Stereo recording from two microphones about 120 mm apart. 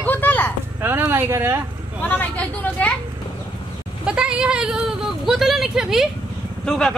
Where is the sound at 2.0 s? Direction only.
15° left (ahead or behind).